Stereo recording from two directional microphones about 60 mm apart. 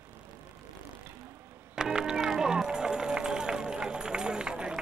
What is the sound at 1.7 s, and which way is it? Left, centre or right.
Music, centre.